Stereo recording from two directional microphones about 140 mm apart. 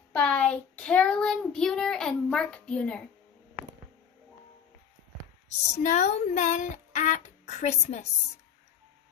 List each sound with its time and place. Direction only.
0.1 s a child's voice: 5° left (ahead or behind)
5.8 s speech: 60° left (ahead or behind)